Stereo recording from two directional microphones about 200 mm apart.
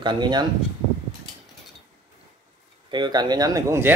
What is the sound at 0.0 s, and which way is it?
Speech, 20° right (ahead or behind).